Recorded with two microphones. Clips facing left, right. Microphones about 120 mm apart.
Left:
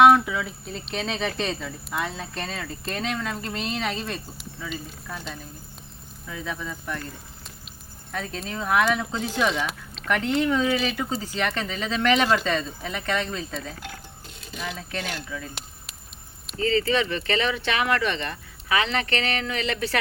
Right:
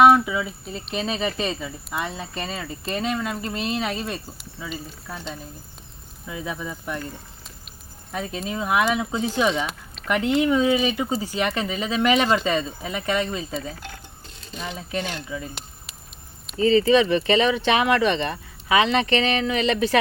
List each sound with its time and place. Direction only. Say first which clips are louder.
0.0 s speech: right 1 dB; 5° right (ahead or behind)
6.2 s speech: right 2 dB; 10° right (ahead or behind)
8.1 s speech: right 3 dB; 10° right (ahead or behind)
14.4 s a sound: right 1 dB; centre (ahead or behind)
14.9 s speech: right 5 dB; centre (ahead or behind)
16.6 s speech: right 6 dB; 15° right (ahead or behind)